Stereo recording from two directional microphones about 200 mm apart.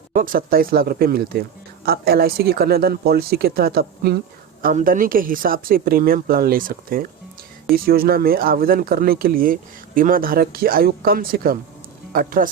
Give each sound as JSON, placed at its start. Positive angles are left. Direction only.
{"t": 0.1, "sound": "speech", "side_deg": -45}